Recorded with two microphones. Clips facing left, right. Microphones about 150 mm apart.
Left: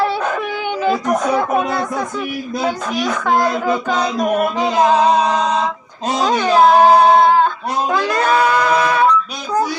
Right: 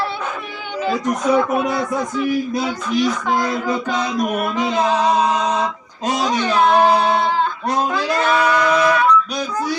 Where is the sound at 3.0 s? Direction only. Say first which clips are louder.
Left 1 dB; 55° left (ahead or behind).